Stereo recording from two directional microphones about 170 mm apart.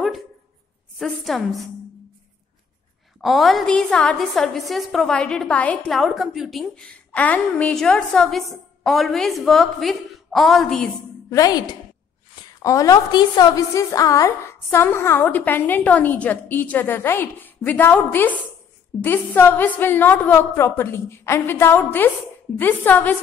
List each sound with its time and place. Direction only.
0.9 s a woman's voice: centre (ahead or behind)
3.2 s a woman's voice: centre (ahead or behind)
11.2 s a woman's voice: 20° left (ahead or behind)